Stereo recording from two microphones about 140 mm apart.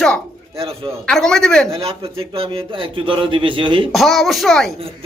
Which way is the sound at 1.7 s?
40° right (ahead or behind).